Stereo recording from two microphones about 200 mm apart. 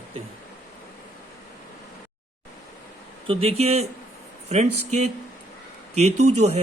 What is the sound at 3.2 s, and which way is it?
A man's voice, 30° right (ahead or behind).